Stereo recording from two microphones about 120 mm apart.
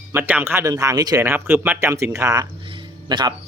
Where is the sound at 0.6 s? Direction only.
30° right (ahead or behind).